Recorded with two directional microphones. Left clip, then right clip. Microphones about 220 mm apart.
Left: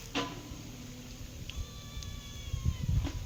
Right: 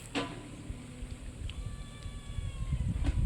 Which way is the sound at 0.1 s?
45° right (ahead or behind).